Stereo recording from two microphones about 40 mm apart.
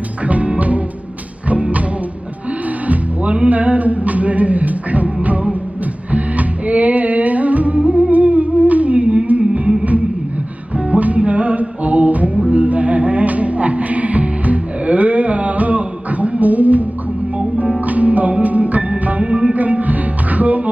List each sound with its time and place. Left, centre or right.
0.3 s music: right
3.4 s music: right
10.9 s music: right
17.8 s music: right